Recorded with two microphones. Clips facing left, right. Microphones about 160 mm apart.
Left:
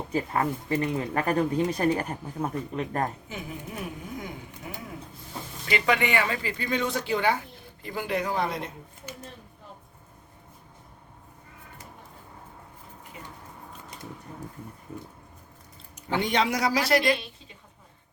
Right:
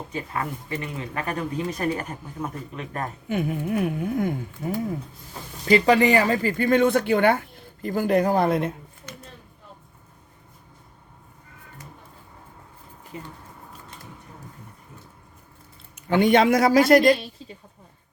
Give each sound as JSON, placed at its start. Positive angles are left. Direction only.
{"t": 0.1, "sound": "speech", "side_deg": 35}
{"t": 3.2, "sound": "speech", "side_deg": -60}
{"t": 16.0, "sound": "speech", "side_deg": -55}